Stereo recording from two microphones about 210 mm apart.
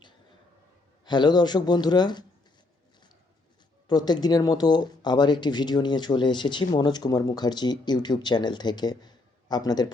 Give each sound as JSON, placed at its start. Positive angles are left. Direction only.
{"t": 1.0, "sound": "speech", "side_deg": 20}
{"t": 3.8, "sound": "speech", "side_deg": 20}